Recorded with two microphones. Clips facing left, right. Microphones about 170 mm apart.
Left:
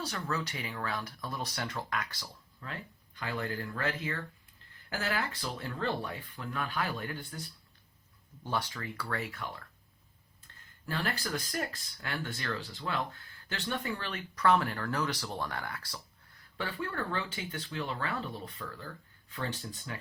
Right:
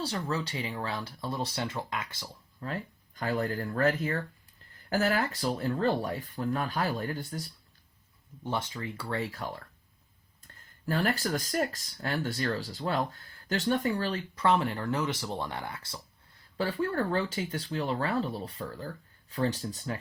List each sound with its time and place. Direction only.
0.0 s speech: 30° right (ahead or behind)
2.6 s speech: 35° right (ahead or behind)
8.4 s speech: 20° right (ahead or behind)
10.8 s speech: 40° right (ahead or behind); by 16.0 s 25° right (ahead or behind)
16.6 s speech: 35° right (ahead or behind)